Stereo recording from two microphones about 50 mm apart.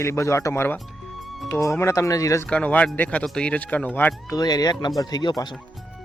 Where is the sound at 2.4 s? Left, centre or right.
Left.